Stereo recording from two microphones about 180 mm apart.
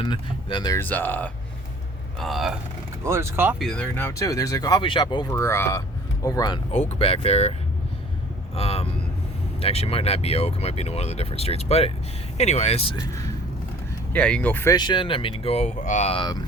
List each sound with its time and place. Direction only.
0.0 s speech: 25° left (ahead or behind)
0.8 s speech: 10° left (ahead or behind)
3.0 s speech: 15° right (ahead or behind)
3.6 s speech: 5° left (ahead or behind); by 6.6 s 20° left (ahead or behind)
6.7 s speech: 35° left (ahead or behind)
8.5 s speech: 35° left (ahead or behind)
14.1 s speech: 5° left (ahead or behind); by 16.4 s 25° left (ahead or behind)